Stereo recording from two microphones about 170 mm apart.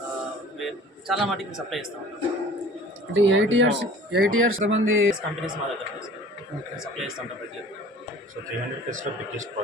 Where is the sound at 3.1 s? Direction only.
90° right.